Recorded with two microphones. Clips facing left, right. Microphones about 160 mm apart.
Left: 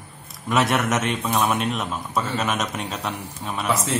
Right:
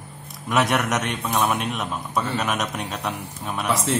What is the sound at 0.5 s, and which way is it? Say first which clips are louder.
A man's voice: left 1 dB; centre (ahead or behind).